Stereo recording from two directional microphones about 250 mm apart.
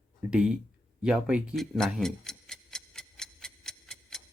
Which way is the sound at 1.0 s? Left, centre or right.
Centre.